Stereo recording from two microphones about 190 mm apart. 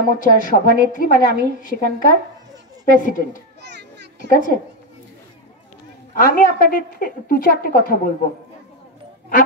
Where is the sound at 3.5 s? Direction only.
65° right (ahead or behind).